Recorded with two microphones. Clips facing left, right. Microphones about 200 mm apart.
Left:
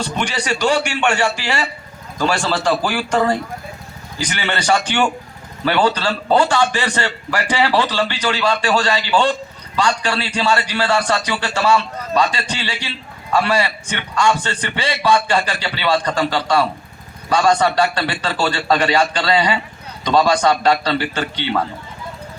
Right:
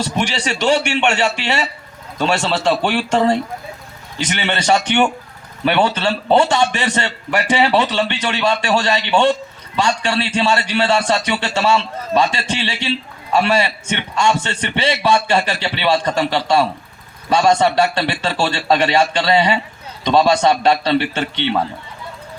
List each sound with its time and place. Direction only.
0.2 s a man's voice: 25° right (ahead or behind)